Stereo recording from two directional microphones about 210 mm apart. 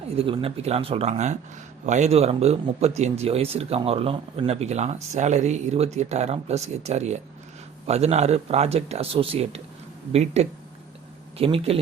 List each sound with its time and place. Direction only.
0.2 s speech: 25° right (ahead or behind)